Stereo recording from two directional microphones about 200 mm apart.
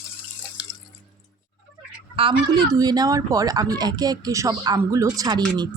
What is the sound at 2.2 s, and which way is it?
Speech, 25° right (ahead or behind).